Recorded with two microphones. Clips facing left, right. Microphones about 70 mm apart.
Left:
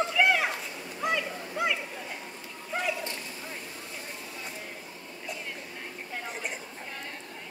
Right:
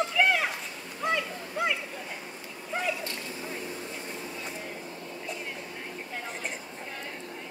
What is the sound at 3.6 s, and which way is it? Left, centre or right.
Vehicle, right.